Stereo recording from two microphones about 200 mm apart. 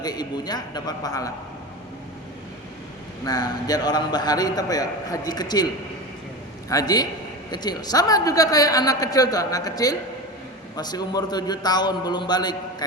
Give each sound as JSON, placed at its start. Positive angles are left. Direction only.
{"t": 0.0, "sound": "a man's voice", "side_deg": 20}
{"t": 3.2, "sound": "a man's voice", "side_deg": 20}
{"t": 6.7, "sound": "a man's voice", "side_deg": 20}